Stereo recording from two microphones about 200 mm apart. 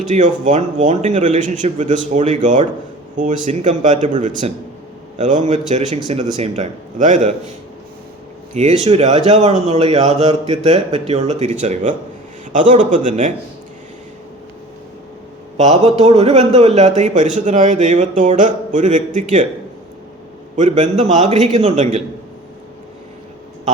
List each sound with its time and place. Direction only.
0.1 s a man's voice: 40° right (ahead or behind)
8.5 s a man's voice: 35° right (ahead or behind)
15.5 s a man's voice: 35° right (ahead or behind)
20.6 s a man's voice: 35° right (ahead or behind)